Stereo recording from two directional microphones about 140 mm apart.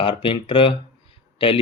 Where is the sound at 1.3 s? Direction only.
40° left (ahead or behind).